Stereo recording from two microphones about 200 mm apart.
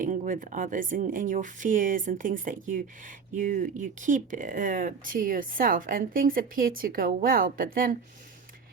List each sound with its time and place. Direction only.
0.0 s speech: 40° right (ahead or behind)